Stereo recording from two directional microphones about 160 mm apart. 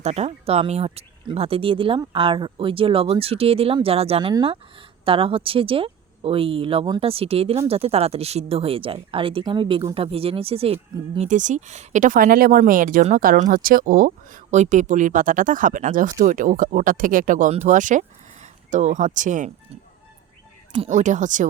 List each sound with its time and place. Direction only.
0.0 s speech: 40° right (ahead or behind)
11.3 s speech: 50° right (ahead or behind)
20.9 s speech: 50° right (ahead or behind)